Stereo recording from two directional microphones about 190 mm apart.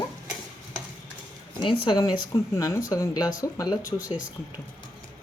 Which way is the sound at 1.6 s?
25° left (ahead or behind).